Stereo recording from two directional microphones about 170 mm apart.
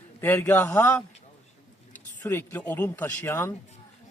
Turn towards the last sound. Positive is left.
turn(degrees=15)  # may be behind; listen again after turning